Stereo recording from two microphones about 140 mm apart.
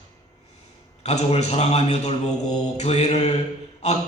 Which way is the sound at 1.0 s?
50° left (ahead or behind).